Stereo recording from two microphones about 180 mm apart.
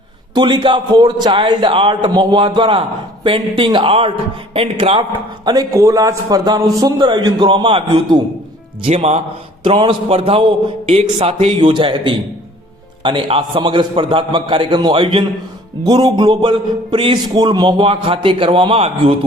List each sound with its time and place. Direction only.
0.3 s a man's voice: 25° right (ahead or behind)
5.5 s a man's voice: 20° right (ahead or behind)
8.8 s a man's voice: 35° right (ahead or behind)